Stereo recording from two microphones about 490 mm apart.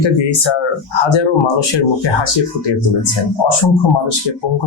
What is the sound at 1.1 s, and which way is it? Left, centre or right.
Speech, left.